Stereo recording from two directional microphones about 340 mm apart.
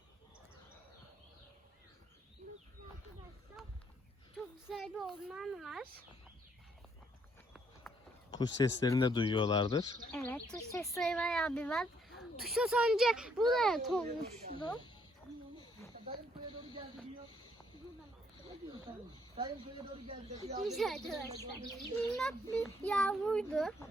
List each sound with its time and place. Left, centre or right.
4.7 s speech: centre
7.9 s a sound: centre
8.3 s speech: centre
14.6 s speech: centre
19.4 s speech: centre
20.7 s speech: centre
21.2 s speech: centre
21.8 s speech: centre